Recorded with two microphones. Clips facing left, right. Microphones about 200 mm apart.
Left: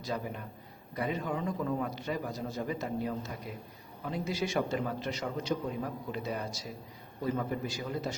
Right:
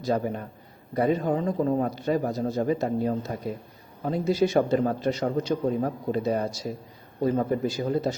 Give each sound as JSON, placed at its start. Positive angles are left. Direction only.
{"t": 0.1, "sound": "a man's voice", "side_deg": -45}